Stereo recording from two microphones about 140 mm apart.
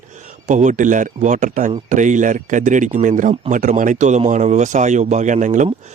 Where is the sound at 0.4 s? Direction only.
60° right (ahead or behind).